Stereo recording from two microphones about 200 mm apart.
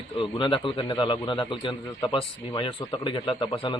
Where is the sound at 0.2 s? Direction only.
25° left (ahead or behind).